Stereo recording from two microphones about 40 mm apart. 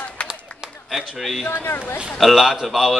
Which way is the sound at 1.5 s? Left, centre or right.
Left.